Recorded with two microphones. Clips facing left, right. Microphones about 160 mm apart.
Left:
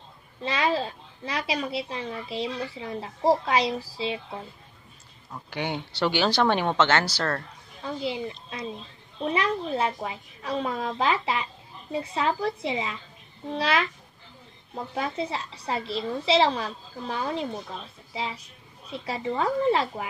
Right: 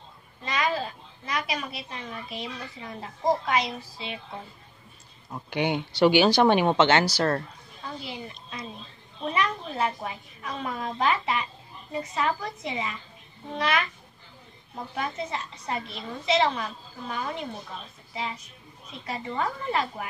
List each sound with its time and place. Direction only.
0.5 s a woman's voice: 30° left (ahead or behind)
5.3 s speech: 20° right (ahead or behind)
8.0 s a woman's voice: 25° left (ahead or behind)
15.0 s a woman's voice: 30° left (ahead or behind)